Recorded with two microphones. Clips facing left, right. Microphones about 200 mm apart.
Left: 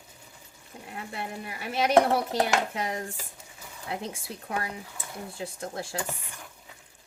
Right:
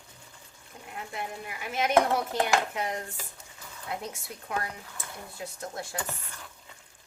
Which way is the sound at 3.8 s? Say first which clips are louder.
Left 2 dB; 30° left (ahead or behind).